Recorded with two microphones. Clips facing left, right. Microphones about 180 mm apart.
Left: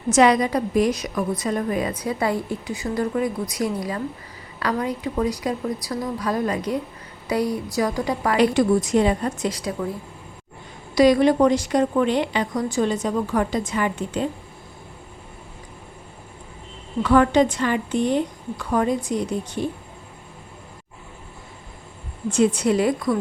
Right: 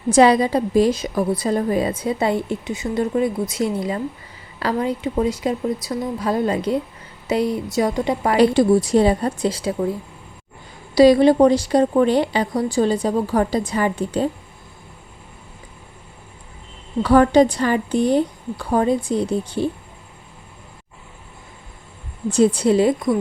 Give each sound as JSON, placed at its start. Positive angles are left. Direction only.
{"t": 0.1, "sound": "a woman's voice", "side_deg": -30}
{"t": 10.9, "sound": "a woman's voice", "side_deg": -30}
{"t": 17.0, "sound": "a woman's voice", "side_deg": -35}
{"t": 22.3, "sound": "a woman's voice", "side_deg": -35}